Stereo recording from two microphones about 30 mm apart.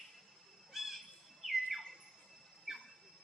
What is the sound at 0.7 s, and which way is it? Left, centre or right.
Squawk, centre.